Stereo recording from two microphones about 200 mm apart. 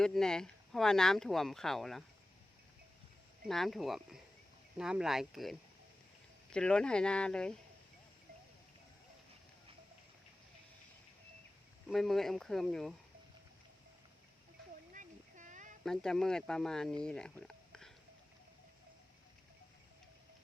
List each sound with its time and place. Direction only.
0.0 s speech: 5° left (ahead or behind)
3.4 s speech: centre (ahead or behind)
11.9 s speech: centre (ahead or behind)
14.9 s a sound: 40° right (ahead or behind)
15.8 s speech: 5° left (ahead or behind)